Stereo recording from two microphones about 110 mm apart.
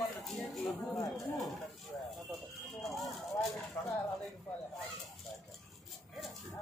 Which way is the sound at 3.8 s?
15° left (ahead or behind).